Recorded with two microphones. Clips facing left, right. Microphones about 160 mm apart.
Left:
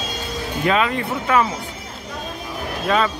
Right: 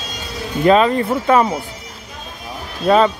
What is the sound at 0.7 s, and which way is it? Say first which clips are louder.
Speech: right 7 dB; 35° right (ahead or behind).